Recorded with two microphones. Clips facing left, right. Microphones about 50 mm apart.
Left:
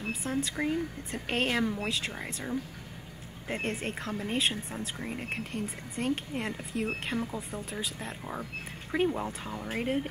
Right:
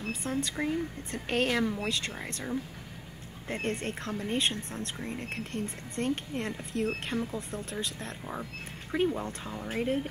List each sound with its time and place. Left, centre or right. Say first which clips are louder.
0.0 s speech: even; centre
9.7 s speech: right 2 dB; centre